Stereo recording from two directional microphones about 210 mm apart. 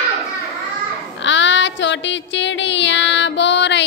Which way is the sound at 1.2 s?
60° left (ahead or behind).